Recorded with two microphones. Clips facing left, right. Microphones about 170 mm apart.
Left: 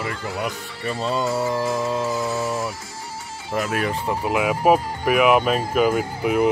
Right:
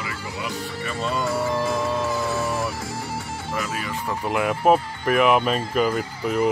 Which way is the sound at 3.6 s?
55° left (ahead or behind).